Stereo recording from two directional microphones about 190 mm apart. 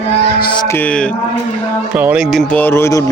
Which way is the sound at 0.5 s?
20° left (ahead or behind).